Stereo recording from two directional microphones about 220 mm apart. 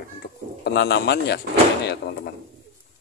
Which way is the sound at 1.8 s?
45° left (ahead or behind).